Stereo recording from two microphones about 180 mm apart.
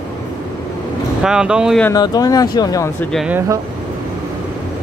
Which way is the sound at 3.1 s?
Centre (ahead or behind).